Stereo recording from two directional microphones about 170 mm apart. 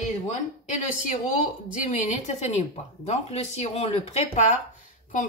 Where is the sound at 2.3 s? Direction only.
40° left (ahead or behind).